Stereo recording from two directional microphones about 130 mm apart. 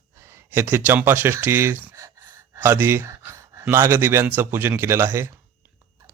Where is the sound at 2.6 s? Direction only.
20° right (ahead or behind).